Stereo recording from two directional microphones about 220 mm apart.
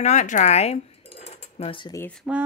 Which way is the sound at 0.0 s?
30° left (ahead or behind).